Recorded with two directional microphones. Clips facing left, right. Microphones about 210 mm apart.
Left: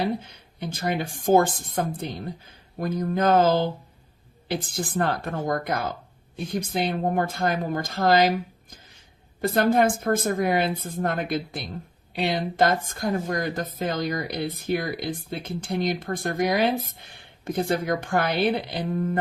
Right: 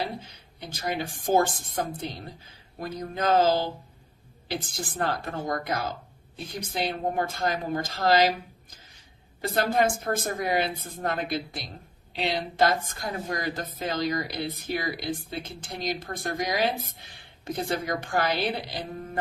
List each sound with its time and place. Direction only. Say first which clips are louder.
0.0 s speech: left 6 dB; 55° left (ahead or behind)
5.0 s speech: left 3 dB; 55° left (ahead or behind)
9.4 s speech: left 4 dB; 55° left (ahead or behind)